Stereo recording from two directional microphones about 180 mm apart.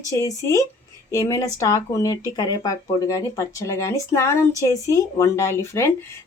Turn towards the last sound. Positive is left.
turn(degrees=15)  # may be behind; listen again after turning